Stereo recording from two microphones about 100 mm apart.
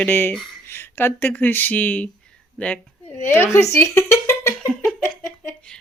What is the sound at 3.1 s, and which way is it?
Speech, 25° left (ahead or behind).